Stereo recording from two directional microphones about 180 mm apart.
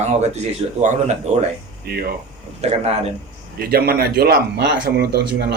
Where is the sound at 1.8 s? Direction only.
60° right (ahead or behind).